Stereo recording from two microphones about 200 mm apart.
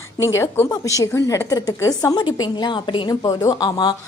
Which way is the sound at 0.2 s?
15° left (ahead or behind).